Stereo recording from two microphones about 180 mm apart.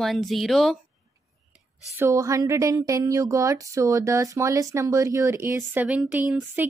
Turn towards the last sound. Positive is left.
turn(degrees=-10)  # may be behind; listen again after turning